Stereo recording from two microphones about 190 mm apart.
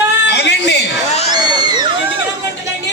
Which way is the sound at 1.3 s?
20° right (ahead or behind).